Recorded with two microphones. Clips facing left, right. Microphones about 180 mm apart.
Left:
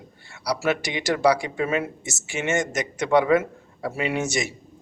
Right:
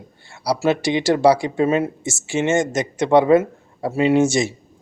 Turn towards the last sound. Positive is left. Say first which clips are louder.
# right 9 dB
turn(degrees=-30)  # may be behind; listen again after turning